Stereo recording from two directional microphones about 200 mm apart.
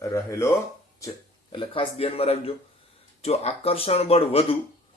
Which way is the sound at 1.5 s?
25° left (ahead or behind).